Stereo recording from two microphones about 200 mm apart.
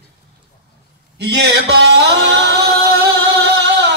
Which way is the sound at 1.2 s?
55° right (ahead or behind).